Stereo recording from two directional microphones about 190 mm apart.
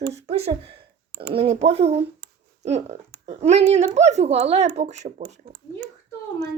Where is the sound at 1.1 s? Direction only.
60° right (ahead or behind).